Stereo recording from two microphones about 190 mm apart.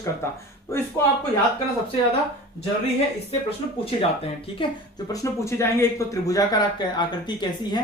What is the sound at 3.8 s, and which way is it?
Speech, 30° left (ahead or behind).